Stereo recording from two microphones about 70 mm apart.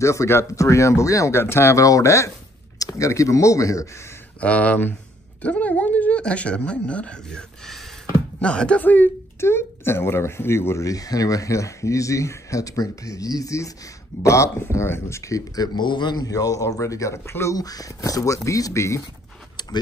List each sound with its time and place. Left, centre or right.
0.0 s speech: left
4.4 s speech: centre
8.4 s speech: centre
9.4 s speech: left
17.6 s speech: left